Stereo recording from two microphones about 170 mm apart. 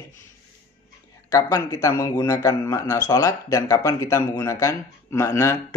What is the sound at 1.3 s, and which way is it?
A man's voice, 20° left (ahead or behind).